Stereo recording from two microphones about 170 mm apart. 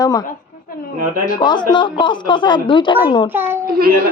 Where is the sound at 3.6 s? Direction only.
60° right (ahead or behind).